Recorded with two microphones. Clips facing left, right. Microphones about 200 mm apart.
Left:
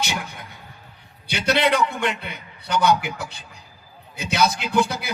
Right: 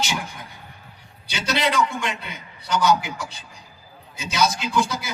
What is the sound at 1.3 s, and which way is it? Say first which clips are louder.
A man's voice: left 4 dB; 60° left (ahead or behind).